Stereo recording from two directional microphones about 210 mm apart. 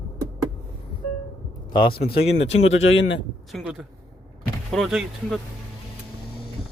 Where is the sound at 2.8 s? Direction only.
60° left (ahead or behind).